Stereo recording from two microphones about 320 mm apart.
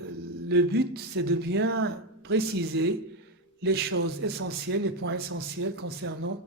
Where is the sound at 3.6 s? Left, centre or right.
Right.